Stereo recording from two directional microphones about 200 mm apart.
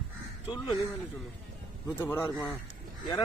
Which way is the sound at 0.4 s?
20° left (ahead or behind).